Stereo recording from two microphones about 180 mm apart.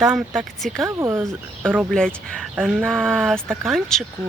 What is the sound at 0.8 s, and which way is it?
Speech, 15° right (ahead or behind).